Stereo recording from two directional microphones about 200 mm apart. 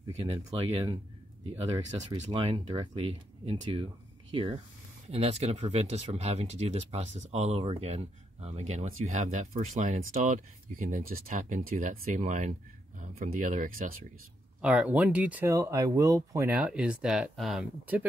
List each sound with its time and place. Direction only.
0.0 s speech: 25° right (ahead or behind)
14.6 s speech: 5° right (ahead or behind)